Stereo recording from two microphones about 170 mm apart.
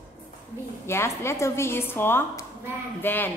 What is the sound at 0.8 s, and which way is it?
A woman's voice, 15° left (ahead or behind).